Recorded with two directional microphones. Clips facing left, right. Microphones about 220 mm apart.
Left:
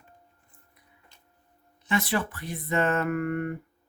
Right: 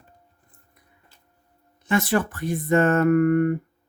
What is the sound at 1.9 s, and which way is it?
Speech, 45° right (ahead or behind).